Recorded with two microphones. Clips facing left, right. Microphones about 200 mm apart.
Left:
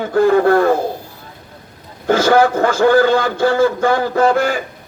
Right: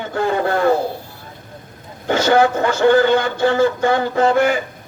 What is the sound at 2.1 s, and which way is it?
Speech, 20° right (ahead or behind).